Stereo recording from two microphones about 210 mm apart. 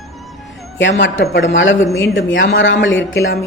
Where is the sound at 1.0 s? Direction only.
60° left (ahead or behind).